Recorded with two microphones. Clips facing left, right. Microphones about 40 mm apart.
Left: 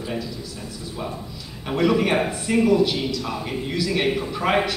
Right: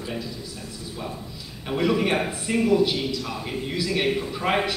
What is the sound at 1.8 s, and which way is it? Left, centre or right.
A man's voice, centre.